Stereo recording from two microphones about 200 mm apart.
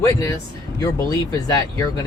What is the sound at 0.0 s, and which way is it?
Speech, 15° left (ahead or behind).